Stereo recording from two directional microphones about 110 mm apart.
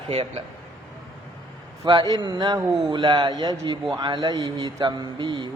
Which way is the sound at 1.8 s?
40° right (ahead or behind).